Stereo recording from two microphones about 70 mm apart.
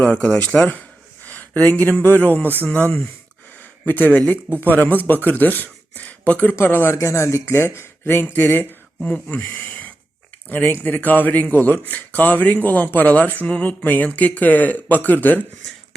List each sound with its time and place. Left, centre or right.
0.0 s speech: left
3.6 s a sound: left
4.6 s speech: left
6.9 s speech: left
9.0 s speech: centre